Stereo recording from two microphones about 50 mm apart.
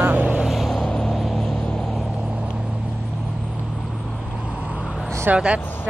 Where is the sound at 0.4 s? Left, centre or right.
Centre.